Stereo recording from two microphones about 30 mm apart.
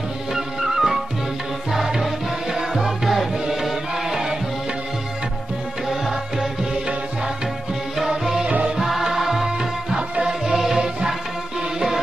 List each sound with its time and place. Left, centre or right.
0.3 s music: centre
5.9 s music: centre
8.7 s music: centre
9.9 s music: right
10.4 s music: centre